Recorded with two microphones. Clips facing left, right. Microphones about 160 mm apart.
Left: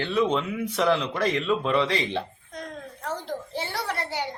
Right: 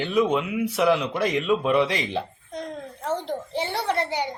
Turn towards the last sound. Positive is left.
turn(degrees=-20)  # may be behind; listen again after turning